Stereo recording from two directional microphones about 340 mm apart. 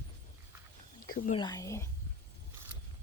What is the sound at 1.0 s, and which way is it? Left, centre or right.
Speech, left.